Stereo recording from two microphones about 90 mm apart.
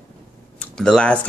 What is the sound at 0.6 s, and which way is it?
Speech, 10° left (ahead or behind).